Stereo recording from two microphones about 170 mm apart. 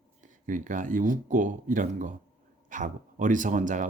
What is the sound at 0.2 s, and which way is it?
Speech, 50° right (ahead or behind).